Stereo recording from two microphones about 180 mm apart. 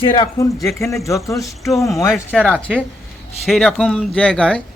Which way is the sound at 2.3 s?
5° left (ahead or behind).